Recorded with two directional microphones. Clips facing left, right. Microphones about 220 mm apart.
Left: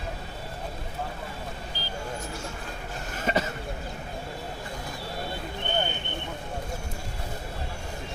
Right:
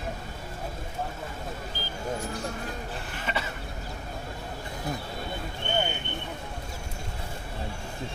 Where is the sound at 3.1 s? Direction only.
40° left (ahead or behind).